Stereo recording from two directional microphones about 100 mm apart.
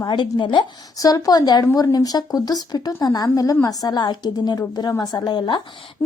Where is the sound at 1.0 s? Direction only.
40° left (ahead or behind).